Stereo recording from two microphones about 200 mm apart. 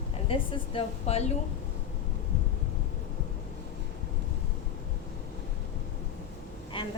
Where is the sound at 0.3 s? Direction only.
25° left (ahead or behind).